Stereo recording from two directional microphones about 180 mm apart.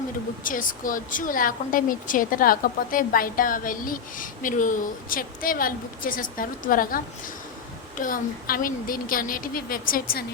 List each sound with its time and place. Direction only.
0.4 s a woman's voice: 50° left (ahead or behind)